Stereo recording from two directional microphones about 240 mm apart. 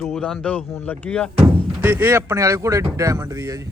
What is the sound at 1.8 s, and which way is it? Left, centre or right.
Speech, centre.